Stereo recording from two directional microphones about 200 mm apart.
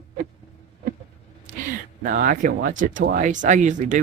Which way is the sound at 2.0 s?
45° right (ahead or behind).